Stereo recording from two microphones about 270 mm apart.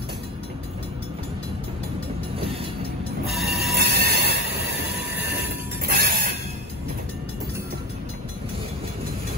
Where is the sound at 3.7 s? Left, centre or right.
Right.